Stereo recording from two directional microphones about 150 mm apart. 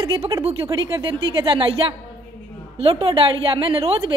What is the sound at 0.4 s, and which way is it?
A woman's voice, 35° right (ahead or behind).